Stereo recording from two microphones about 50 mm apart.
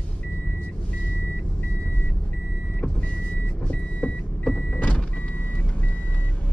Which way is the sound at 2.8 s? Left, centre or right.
Left.